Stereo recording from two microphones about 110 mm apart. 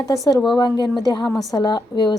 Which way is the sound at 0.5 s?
45° left (ahead or behind).